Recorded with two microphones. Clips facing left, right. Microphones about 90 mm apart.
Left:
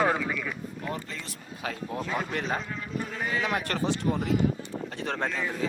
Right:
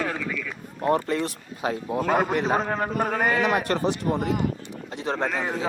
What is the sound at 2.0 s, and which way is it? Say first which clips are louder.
Speech: right 9 dB; 55° right (ahead or behind).